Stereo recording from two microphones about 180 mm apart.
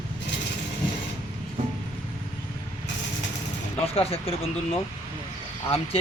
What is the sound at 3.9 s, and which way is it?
Speech, 35° left (ahead or behind).